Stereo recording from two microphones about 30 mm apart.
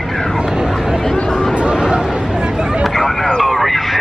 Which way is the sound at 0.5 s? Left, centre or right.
Centre.